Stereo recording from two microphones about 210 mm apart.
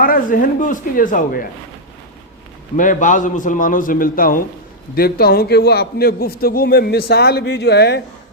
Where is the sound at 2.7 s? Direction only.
35° left (ahead or behind).